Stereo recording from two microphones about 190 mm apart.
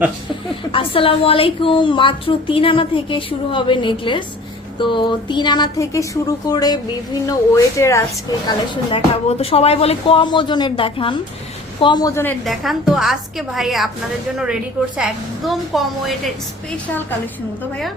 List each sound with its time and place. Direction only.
0.7 s a woman's voice: 30° left (ahead or behind); by 12.4 s 10° left (ahead or behind)
12.5 s a woman's voice: centre (ahead or behind)
14.9 s a woman's voice: centre (ahead or behind)